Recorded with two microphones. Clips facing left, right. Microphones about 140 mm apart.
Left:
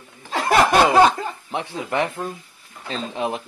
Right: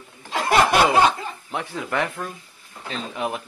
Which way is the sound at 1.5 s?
20° left (ahead or behind).